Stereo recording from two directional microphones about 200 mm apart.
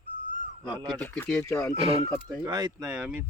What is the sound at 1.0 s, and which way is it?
Speech, 5° left (ahead or behind).